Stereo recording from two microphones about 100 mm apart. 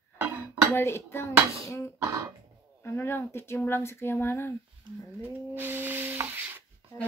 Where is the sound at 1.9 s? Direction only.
30° right (ahead or behind).